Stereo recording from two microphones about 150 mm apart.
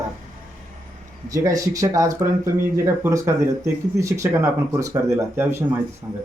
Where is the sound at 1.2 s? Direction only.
20° right (ahead or behind).